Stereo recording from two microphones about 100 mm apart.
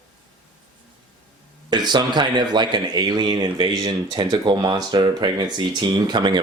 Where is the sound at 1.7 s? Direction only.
45° right (ahead or behind).